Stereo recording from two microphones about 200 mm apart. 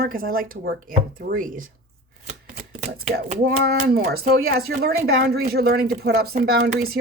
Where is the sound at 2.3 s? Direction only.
35° right (ahead or behind).